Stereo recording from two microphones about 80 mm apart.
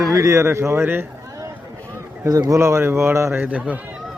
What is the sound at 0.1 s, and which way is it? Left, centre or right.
Speech, right.